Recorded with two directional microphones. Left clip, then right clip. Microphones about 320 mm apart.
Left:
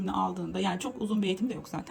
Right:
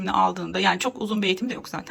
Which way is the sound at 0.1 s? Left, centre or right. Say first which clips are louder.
Right 10 dB; centre.